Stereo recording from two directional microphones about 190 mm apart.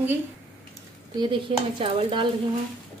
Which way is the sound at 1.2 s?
25° right (ahead or behind).